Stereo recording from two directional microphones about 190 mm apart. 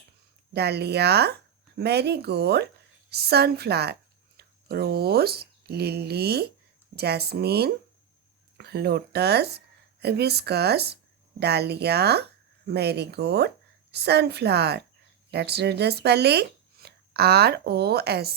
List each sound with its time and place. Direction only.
0.5 s speech: 60° right (ahead or behind)